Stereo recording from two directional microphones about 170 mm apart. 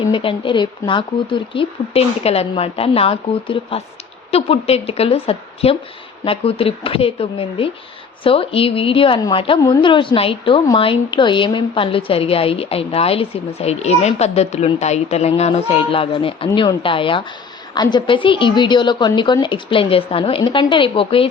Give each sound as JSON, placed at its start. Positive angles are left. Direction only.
{"t": 0.1, "sound": "a woman's voice", "side_deg": 30}